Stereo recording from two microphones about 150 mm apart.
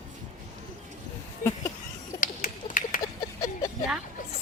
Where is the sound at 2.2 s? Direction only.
60° left (ahead or behind).